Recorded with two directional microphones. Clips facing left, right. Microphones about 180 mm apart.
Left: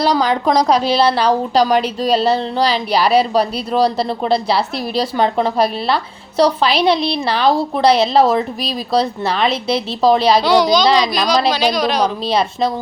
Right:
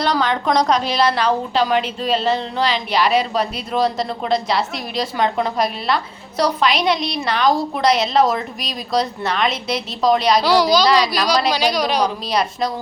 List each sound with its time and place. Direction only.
0.0 s a woman's voice: 35° left (ahead or behind)
10.4 s a child's voice: 5° right (ahead or behind)
12.3 s a woman's voice: 25° left (ahead or behind)